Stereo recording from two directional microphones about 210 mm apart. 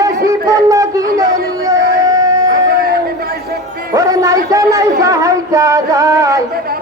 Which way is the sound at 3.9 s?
15° right (ahead or behind).